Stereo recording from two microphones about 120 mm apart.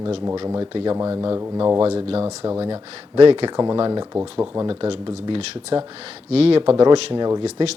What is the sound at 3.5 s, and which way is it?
Speech, 35° right (ahead or behind).